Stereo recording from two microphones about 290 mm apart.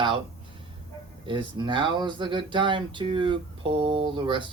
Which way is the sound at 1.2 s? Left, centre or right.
Centre.